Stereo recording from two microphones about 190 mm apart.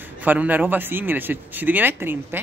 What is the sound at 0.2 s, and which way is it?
Speech, 10° right (ahead or behind).